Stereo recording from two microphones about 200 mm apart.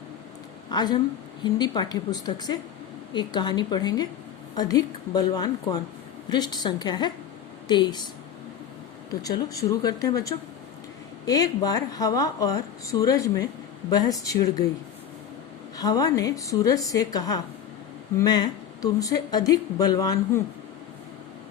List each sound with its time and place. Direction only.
0.7 s a woman's voice: 20° left (ahead or behind)
9.2 s speech: 15° left (ahead or behind)
15.8 s speech: 20° left (ahead or behind)